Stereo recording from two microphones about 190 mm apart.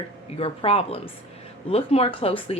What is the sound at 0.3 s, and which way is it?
Speech, 30° left (ahead or behind).